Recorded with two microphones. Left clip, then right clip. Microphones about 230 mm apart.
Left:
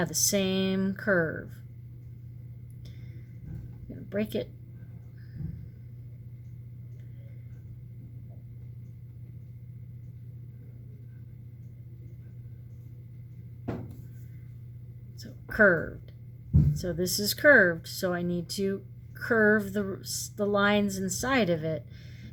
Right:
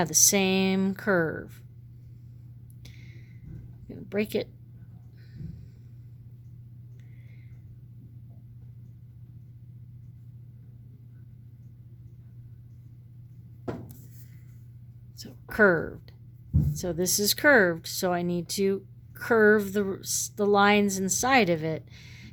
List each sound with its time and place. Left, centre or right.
0.0 s speech: right
4.1 s speech: right
15.2 s a sound: right
16.7 s speech: right